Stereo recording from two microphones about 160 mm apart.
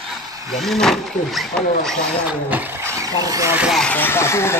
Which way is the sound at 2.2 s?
10° right (ahead or behind).